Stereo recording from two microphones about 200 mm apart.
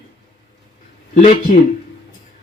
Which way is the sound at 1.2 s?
40° left (ahead or behind).